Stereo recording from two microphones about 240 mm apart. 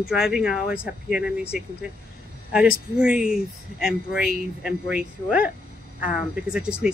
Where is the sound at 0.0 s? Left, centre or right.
Centre.